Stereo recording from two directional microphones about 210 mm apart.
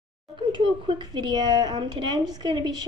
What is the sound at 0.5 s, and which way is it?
A woman's voice, 25° right (ahead or behind).